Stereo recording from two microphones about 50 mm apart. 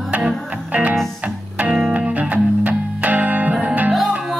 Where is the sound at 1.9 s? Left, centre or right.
Right.